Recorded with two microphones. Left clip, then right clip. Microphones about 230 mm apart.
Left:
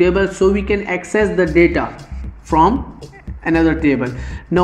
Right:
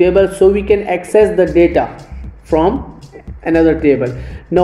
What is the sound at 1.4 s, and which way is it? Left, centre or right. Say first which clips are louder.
Speech: right 3 dB; left.